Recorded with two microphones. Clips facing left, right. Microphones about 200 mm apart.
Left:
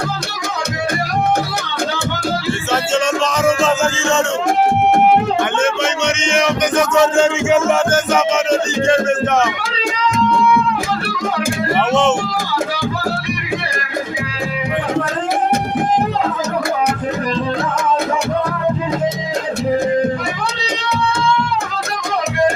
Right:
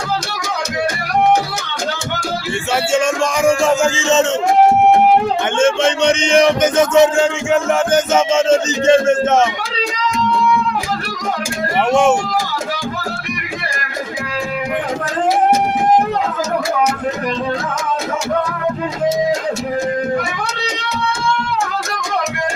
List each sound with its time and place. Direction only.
3.4 s music: 15° right (ahead or behind)
5.5 s music: 30° right (ahead or behind)
7.2 s a man's voice: centre (ahead or behind)
7.9 s music: 20° right (ahead or behind)